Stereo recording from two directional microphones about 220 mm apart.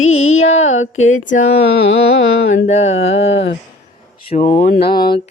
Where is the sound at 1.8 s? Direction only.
55° left (ahead or behind).